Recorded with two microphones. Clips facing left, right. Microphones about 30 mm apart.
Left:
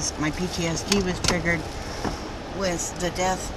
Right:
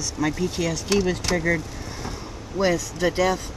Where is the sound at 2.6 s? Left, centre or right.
Right.